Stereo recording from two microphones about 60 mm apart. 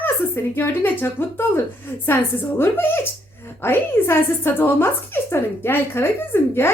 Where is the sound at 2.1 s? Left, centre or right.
Left.